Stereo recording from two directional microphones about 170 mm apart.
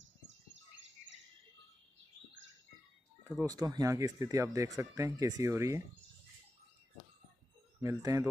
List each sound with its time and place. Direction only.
3.4 s speech: 25° right (ahead or behind)
7.8 s speech: 20° right (ahead or behind)